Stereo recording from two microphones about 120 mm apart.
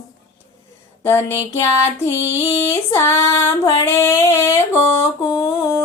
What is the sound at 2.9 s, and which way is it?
Female singing, 20° left (ahead or behind).